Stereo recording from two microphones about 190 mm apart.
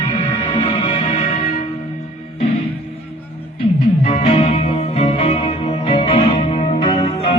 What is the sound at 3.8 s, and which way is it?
Music, 30° left (ahead or behind).